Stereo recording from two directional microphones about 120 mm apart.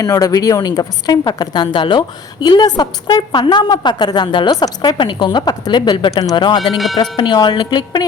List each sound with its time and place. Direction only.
0.0 s speech: 30° left (ahead or behind)